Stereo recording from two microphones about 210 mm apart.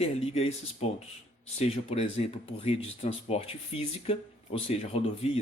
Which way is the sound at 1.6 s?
30° left (ahead or behind).